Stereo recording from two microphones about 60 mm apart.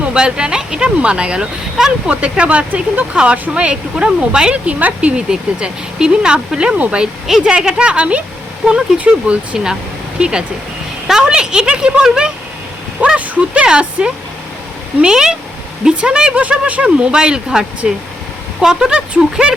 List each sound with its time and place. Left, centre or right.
0.0 s speech: centre
2.4 s speech: centre
9.2 s speech: centre